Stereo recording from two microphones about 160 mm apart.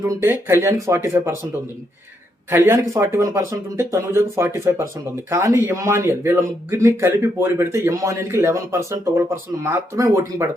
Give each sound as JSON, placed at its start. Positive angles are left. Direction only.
{"t": 0.1, "sound": "speech", "side_deg": -20}
{"t": 2.5, "sound": "speech", "side_deg": -15}